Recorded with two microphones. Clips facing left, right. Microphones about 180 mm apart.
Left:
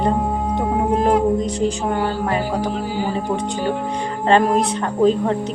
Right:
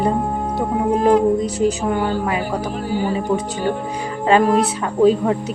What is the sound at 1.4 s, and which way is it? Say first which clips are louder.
Speech: right 2 dB; 5° right (ahead or behind).